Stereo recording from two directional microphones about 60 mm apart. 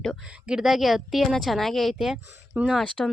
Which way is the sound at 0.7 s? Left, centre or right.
Centre.